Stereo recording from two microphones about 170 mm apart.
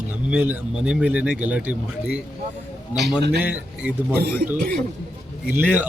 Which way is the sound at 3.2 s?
70° right (ahead or behind).